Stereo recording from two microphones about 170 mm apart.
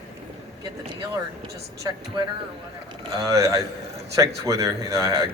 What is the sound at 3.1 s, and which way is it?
Speech, 20° right (ahead or behind).